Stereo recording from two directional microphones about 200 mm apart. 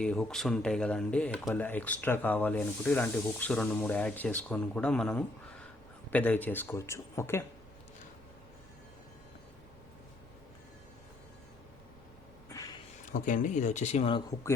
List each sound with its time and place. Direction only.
0.0 s speech: 5° left (ahead or behind)
13.1 s speech: 40° left (ahead or behind)